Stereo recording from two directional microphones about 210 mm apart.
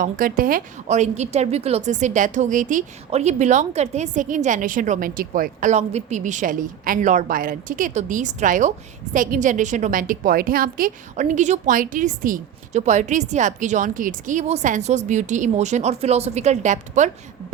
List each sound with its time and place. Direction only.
0.0 s a woman's voice: 40° right (ahead or behind)